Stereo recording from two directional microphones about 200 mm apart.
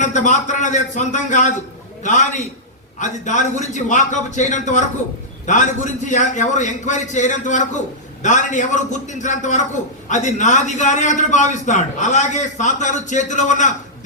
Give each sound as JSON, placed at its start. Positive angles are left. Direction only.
{"t": 0.0, "sound": "a man's voice", "side_deg": 35}